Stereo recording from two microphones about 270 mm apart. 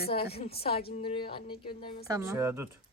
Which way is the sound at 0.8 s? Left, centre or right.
Left.